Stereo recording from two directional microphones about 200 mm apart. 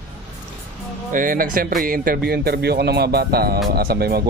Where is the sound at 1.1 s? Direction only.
45° right (ahead or behind).